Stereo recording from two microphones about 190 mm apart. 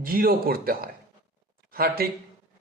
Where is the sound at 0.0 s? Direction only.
50° right (ahead or behind).